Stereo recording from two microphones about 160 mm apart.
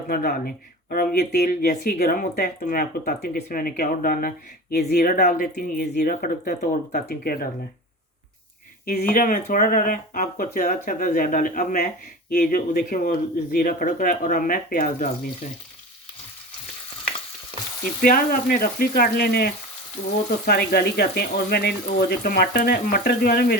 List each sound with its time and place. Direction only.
0.1 s speech: 70° left (ahead or behind)
8.9 s speech: 65° left (ahead or behind)
18.0 s speech: 65° left (ahead or behind); by 19.5 s 80° left
20.5 s speech: 80° left